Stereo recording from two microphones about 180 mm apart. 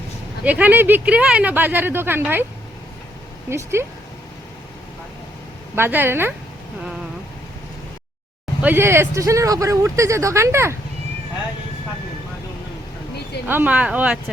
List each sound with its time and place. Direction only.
0.4 s speech: 10° right (ahead or behind)
3.5 s speech: 15° right (ahead or behind)
5.7 s speech: 10° right (ahead or behind)
8.6 s speech: 10° right (ahead or behind)
13.5 s speech: 10° right (ahead or behind)